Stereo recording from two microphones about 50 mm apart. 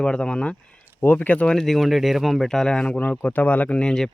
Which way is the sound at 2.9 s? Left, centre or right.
Left.